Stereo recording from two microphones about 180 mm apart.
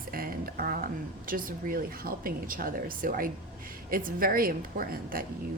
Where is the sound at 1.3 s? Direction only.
50° right (ahead or behind).